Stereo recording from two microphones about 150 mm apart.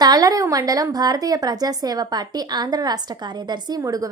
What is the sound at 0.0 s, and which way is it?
A woman's voice, 25° right (ahead or behind).